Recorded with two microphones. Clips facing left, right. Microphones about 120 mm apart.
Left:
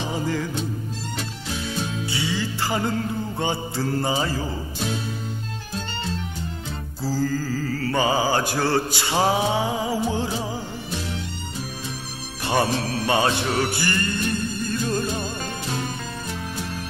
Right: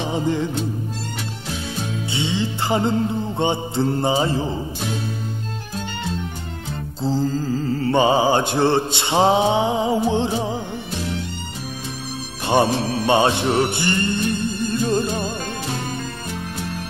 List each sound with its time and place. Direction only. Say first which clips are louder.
0.0 s music: right 4 dB; 25° right (ahead or behind)
2.1 s mantra: right 4 dB; 25° right (ahead or behind)
7.0 s mantra: right 3 dB; 25° right (ahead or behind)
12.4 s mantra: right 4 dB; 20° right (ahead or behind)
14.7 s music: right 4 dB; 25° right (ahead or behind)